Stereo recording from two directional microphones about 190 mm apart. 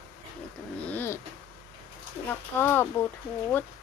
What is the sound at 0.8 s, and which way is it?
Speech, 10° left (ahead or behind).